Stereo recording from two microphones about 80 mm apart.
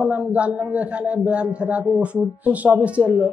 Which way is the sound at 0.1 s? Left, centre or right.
Centre.